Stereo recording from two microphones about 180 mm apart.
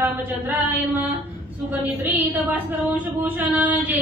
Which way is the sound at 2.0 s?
10° right (ahead or behind).